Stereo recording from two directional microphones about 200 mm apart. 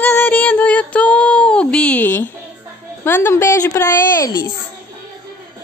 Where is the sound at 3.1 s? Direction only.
10° left (ahead or behind).